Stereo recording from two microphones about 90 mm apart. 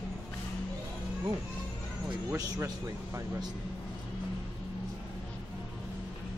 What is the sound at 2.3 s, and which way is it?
Speech, 35° right (ahead or behind).